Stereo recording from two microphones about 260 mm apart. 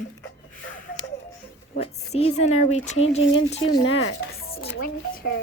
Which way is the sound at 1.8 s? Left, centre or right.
Left.